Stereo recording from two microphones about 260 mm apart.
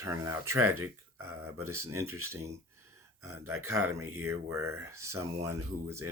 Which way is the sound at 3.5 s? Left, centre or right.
Right.